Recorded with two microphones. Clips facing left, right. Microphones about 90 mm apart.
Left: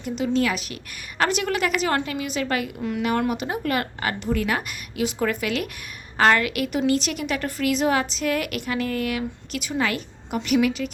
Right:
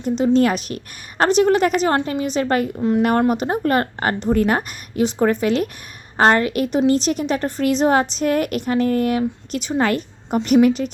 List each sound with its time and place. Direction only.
0.0 s a woman's voice: 40° right (ahead or behind)
1.2 s a woman's voice: 30° right (ahead or behind)
3.0 s a woman's voice: 45° right (ahead or behind)